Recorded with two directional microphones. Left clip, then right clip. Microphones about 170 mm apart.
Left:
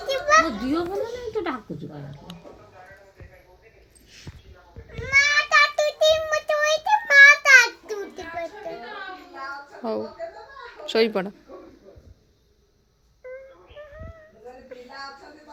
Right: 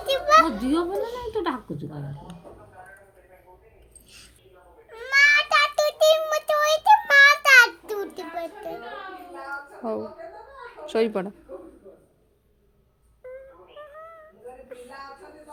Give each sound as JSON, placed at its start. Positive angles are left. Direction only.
{"t": 0.1, "sound": "a sound", "side_deg": -20}
{"t": 1.0, "sound": "a child's voice", "side_deg": -15}
{"t": 2.3, "sound": "music", "side_deg": -10}
{"t": 4.9, "sound": "child singing", "side_deg": -20}
{"t": 9.8, "sound": "a child's voice", "side_deg": -5}